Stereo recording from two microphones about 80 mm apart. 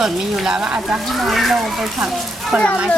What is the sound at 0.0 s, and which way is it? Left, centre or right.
A child's voice, centre.